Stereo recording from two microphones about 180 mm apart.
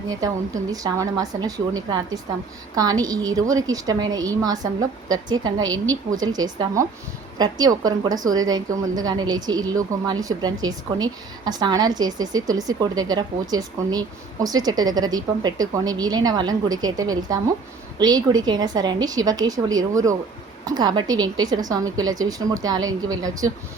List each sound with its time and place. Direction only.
0.1 s a woman's voice: 20° right (ahead or behind)